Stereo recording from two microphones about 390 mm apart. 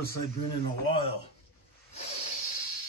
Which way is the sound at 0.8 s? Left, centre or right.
Centre.